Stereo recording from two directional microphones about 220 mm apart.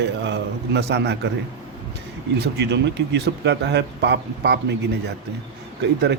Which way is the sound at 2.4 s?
50° right (ahead or behind).